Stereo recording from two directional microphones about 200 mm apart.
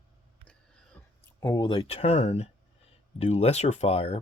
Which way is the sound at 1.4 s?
20° left (ahead or behind).